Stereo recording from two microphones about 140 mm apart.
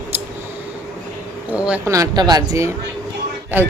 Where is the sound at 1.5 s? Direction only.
10° right (ahead or behind).